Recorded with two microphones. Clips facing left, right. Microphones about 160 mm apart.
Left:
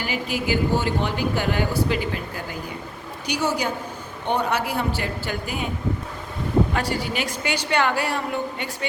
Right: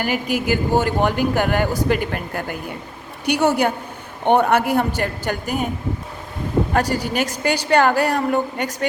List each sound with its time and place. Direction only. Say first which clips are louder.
0.0 s a woman's voice: right 5 dB; 50° right (ahead or behind)
6.7 s a woman's voice: right 5 dB; 40° right (ahead or behind)